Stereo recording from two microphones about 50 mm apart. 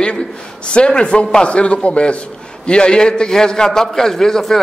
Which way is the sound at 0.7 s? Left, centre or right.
Centre.